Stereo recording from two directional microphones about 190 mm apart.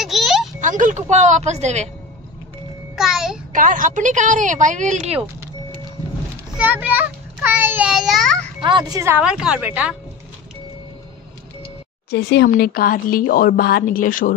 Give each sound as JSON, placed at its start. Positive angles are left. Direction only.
{"t": 0.0, "sound": "a sound", "side_deg": 0}
{"t": 0.6, "sound": "a woman's voice", "side_deg": -40}
{"t": 3.0, "sound": "a child's voice", "side_deg": -5}
{"t": 3.5, "sound": "a woman's voice", "side_deg": -45}
{"t": 6.5, "sound": "a child's voice", "side_deg": -10}
{"t": 8.6, "sound": "speech", "side_deg": -20}
{"t": 12.1, "sound": "speech", "side_deg": 60}